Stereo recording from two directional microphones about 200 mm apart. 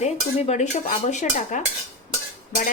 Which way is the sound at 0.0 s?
35° left (ahead or behind).